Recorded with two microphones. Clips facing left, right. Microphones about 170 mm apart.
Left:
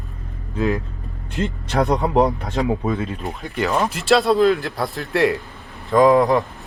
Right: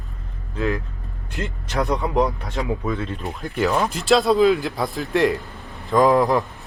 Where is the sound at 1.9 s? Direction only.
30° left (ahead or behind).